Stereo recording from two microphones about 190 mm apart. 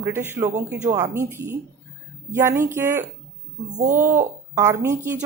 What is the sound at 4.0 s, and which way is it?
A woman's voice, 10° right (ahead or behind).